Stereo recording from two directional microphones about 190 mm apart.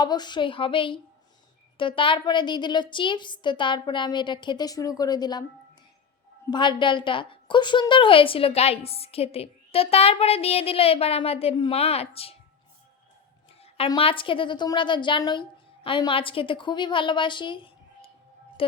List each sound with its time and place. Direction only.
0.0 s a woman's voice: 20° left (ahead or behind)
6.5 s a woman's voice: 25° left (ahead or behind)
13.6 s a woman's voice: 30° left (ahead or behind)